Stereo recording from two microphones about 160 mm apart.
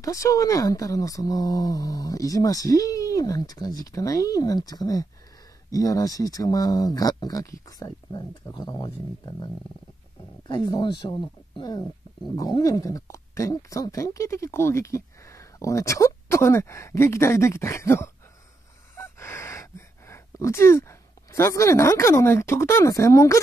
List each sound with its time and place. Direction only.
0.0 s speech: 20° left (ahead or behind)
10.5 s speech: 25° left (ahead or behind)
19.1 s gasp: 20° left (ahead or behind)
21.3 s speech: 20° left (ahead or behind)